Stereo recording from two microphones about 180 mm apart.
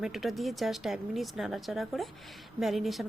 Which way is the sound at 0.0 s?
Centre (ahead or behind).